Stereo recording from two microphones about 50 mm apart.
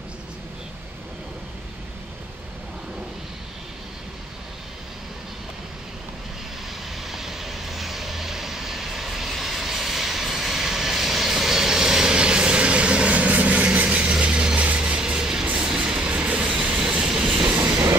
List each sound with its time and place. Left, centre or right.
7.0 s vehicle: centre; by 14.1 s right
14.2 s music: right
15.5 s train: centre
16.7 s train: centre